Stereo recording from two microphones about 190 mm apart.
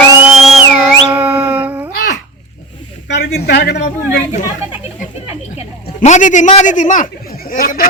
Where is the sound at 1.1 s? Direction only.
5° right (ahead or behind).